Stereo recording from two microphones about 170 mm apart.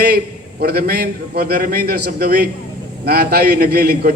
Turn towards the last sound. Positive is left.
turn(degrees=-65)  # may be behind; listen again after turning